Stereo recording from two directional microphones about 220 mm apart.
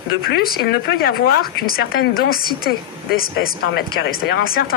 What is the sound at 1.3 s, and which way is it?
Speech, 40° left (ahead or behind).